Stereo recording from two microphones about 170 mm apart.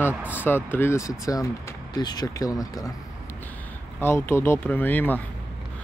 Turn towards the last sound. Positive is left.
turn(degrees=10)  # may be behind; listen again after turning